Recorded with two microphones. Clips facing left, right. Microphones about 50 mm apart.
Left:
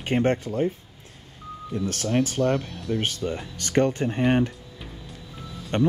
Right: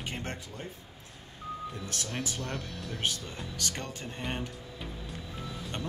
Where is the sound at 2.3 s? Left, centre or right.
Left.